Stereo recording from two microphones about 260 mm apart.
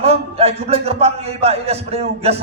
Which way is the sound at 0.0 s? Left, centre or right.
Right.